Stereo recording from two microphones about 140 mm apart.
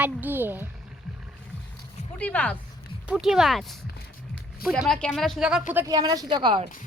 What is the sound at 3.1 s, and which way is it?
Speech, 5° right (ahead or behind).